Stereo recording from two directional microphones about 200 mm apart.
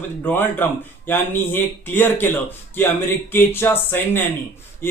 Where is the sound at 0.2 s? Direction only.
10° left (ahead or behind).